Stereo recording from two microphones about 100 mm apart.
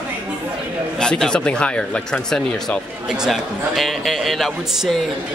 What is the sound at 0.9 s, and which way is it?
A man's voice, 10° left (ahead or behind).